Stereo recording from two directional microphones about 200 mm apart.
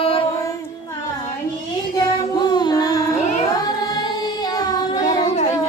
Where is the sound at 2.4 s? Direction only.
20° left (ahead or behind).